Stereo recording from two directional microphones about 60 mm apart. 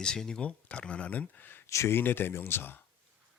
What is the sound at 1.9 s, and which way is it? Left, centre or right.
Speech, left.